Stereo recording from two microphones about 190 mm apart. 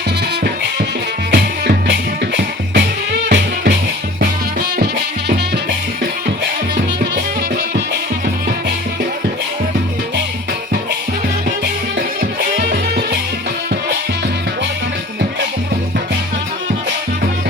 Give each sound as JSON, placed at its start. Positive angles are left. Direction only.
{"t": 1.3, "sound": "music", "side_deg": -60}
{"t": 12.7, "sound": "music", "side_deg": -55}